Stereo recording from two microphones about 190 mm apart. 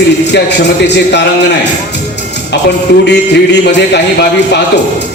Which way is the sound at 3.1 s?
65° left (ahead or behind).